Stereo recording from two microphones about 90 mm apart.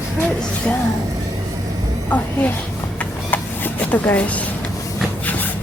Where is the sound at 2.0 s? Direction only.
20° left (ahead or behind).